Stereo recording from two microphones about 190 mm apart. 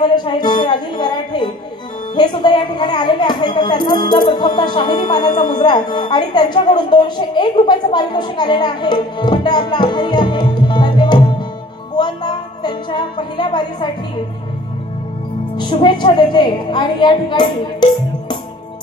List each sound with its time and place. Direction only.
0.0 s a woman's voice: 25° left (ahead or behind)
12.0 s music: 25° left (ahead or behind)
15.7 s a woman's voice: 25° left (ahead or behind)